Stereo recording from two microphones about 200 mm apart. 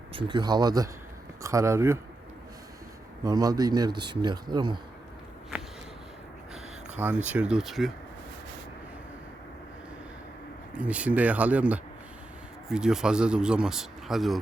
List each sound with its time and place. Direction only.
0.1 s speech: 25° right (ahead or behind)
3.2 s speech: 20° right (ahead or behind)
7.3 s speech: 5° right (ahead or behind)
10.8 s speech: 5° right (ahead or behind)